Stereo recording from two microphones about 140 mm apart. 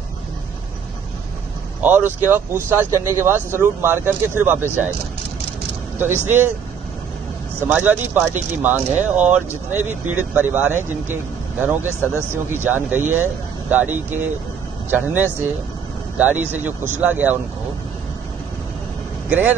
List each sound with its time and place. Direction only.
1.8 s speech: 15° right (ahead or behind)
5.9 s speech: 15° right (ahead or behind)
7.6 s speech: 15° right (ahead or behind)
12.0 s speech: 15° left (ahead or behind)
12.3 s speech: 15° right (ahead or behind)
19.2 s speech: 10° right (ahead or behind)